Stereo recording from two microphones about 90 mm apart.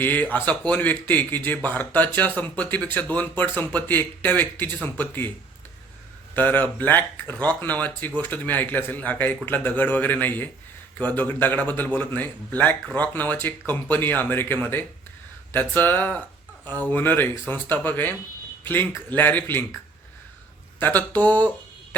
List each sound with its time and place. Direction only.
0.0 s speech: 20° left (ahead or behind)
6.3 s speech: 20° left (ahead or behind)
20.7 s speech: 20° left (ahead or behind)